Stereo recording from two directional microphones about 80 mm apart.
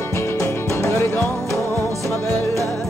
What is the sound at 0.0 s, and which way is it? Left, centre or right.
Music, left.